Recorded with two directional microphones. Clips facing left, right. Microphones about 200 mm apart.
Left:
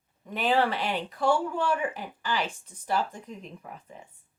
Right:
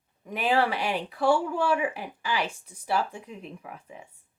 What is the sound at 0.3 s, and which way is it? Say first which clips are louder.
Speech: even; 10° right (ahead or behind).